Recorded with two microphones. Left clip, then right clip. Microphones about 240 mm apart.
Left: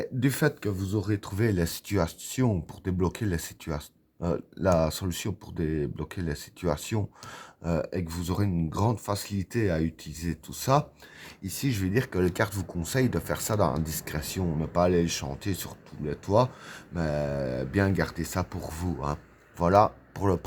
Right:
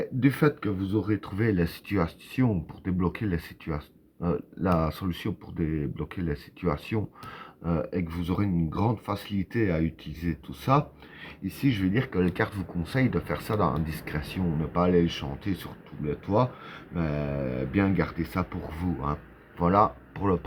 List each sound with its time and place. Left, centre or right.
0.2 s speech: left